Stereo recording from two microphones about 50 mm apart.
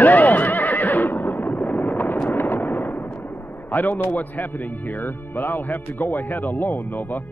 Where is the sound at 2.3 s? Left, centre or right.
Left.